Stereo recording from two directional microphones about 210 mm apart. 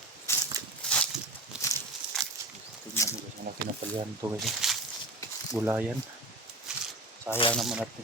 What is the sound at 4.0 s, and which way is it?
Speech, 15° right (ahead or behind).